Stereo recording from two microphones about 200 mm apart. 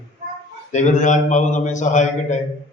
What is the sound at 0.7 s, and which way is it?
A man's voice, 35° left (ahead or behind).